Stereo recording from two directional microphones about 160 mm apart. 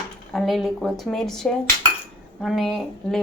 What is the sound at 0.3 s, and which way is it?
Speech, centre (ahead or behind).